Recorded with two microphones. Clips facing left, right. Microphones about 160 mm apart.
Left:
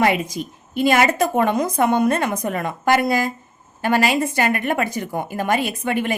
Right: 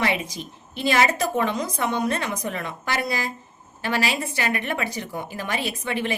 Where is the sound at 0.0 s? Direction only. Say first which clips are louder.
Left 6 dB; 45° left (ahead or behind).